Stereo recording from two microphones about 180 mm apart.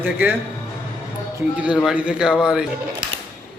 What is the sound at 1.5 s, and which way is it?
Speech, 5° right (ahead or behind).